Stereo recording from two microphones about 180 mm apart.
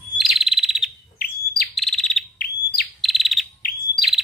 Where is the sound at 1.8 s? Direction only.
Centre (ahead or behind).